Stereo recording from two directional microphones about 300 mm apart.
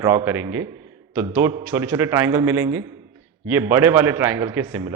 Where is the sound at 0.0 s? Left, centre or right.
Centre.